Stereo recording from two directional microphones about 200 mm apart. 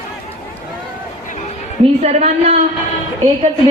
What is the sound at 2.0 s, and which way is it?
Speech, 30° right (ahead or behind).